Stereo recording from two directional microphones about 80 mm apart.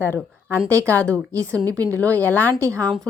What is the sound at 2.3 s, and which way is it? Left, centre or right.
Speech, centre.